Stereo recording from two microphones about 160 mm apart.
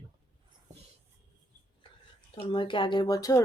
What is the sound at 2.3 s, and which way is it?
A woman's voice, 30° left (ahead or behind).